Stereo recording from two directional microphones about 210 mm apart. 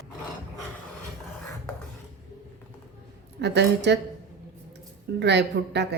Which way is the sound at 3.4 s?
55° right (ahead or behind).